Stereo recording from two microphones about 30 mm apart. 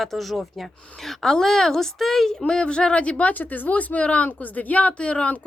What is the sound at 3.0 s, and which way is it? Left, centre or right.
Speech, left.